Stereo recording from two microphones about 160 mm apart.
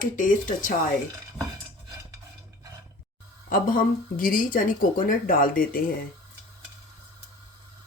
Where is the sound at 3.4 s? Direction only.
60° left (ahead or behind).